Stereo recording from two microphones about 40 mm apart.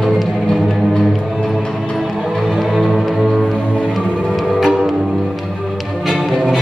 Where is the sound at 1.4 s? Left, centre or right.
Centre.